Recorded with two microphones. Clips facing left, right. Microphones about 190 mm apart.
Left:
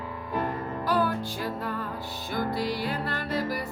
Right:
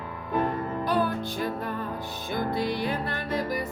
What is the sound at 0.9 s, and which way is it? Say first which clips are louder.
Music: left 1 dB; 20° right (ahead or behind).